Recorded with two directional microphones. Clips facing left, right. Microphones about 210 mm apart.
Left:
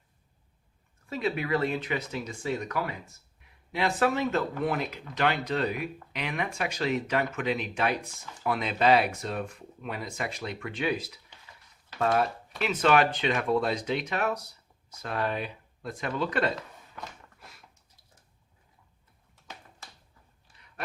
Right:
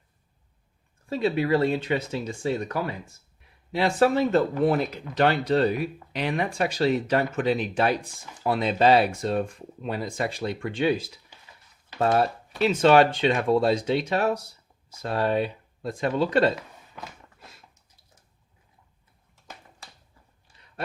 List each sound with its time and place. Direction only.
1.1 s speech: 30° right (ahead or behind)